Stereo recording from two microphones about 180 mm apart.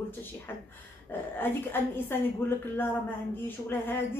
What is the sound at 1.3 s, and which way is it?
A woman's voice, 10° left (ahead or behind).